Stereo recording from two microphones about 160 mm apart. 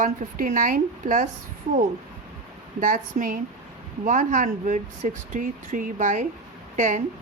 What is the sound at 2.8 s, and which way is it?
A woman's voice, 55° right (ahead or behind).